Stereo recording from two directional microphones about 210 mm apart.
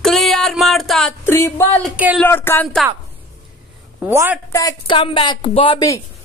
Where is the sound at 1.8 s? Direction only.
5° right (ahead or behind).